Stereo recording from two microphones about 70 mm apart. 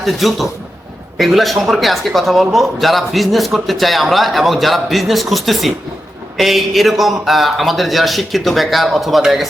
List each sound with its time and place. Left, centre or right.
0.0 s speech: centre